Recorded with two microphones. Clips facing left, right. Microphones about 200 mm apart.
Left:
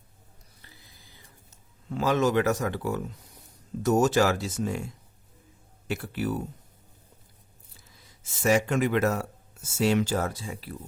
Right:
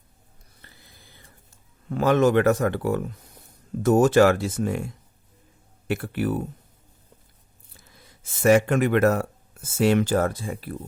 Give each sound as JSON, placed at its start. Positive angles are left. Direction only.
{"t": 0.6, "sound": "a sound", "side_deg": -55}
{"t": 1.9, "sound": "speech", "side_deg": -55}
{"t": 5.9, "sound": "speech", "side_deg": -55}
{"t": 7.9, "sound": "speech", "side_deg": -55}